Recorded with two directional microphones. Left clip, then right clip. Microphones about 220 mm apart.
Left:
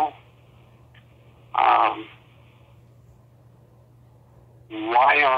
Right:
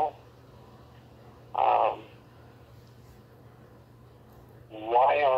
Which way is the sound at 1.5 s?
20° left (ahead or behind).